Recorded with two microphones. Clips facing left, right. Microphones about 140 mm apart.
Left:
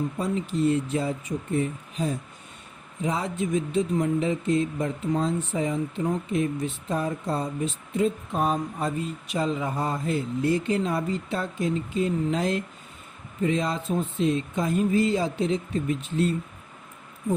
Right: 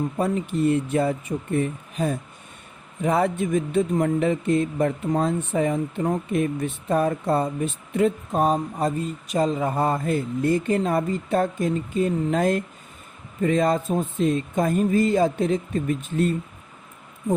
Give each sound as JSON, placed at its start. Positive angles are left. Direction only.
{"t": 0.2, "sound": "speech", "side_deg": -60}
{"t": 8.3, "sound": "speech", "side_deg": -40}